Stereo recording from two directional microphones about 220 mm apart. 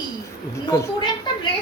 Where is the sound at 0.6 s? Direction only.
15° left (ahead or behind).